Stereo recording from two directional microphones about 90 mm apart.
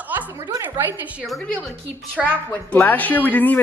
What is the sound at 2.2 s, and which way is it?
A woman's voice, 20° left (ahead or behind).